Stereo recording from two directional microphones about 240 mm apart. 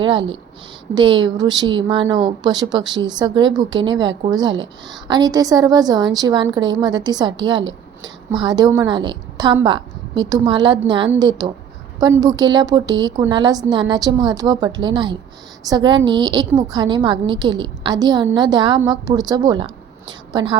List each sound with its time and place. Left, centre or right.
0.0 s a woman's voice: right